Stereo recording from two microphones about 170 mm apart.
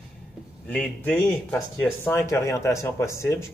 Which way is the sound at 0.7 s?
5° left (ahead or behind).